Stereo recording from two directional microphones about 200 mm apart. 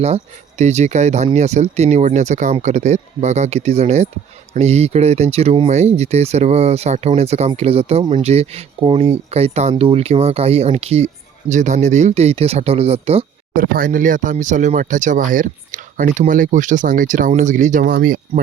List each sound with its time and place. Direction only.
0.0 s speech: 35° right (ahead or behind)
13.5 s speech: 45° right (ahead or behind)